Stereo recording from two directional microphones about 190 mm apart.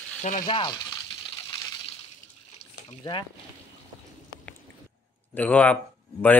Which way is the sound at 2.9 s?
25° left (ahead or behind).